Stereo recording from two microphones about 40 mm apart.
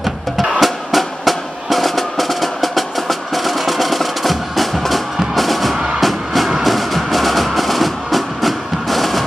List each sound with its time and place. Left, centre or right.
0.0 s music: centre